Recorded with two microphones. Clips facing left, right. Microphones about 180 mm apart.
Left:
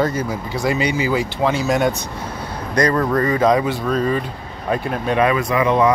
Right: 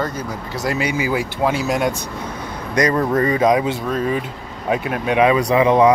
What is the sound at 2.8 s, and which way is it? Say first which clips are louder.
Speech: even; 20° right (ahead or behind).